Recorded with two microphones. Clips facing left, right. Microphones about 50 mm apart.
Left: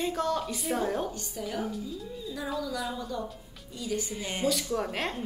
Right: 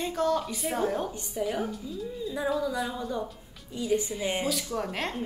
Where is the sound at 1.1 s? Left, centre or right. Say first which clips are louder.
Right 5 dB; centre.